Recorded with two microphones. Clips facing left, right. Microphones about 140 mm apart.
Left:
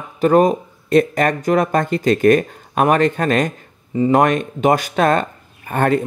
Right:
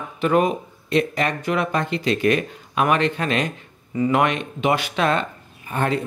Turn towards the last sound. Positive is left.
turn(degrees=55)  # may be behind; listen again after turning